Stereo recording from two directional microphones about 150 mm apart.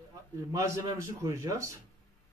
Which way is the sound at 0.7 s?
20° right (ahead or behind).